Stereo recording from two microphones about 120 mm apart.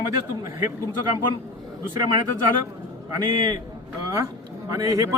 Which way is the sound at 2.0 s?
35° right (ahead or behind).